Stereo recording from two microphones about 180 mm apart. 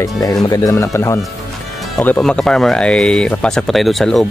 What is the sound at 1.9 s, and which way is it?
Speech, 5° left (ahead or behind).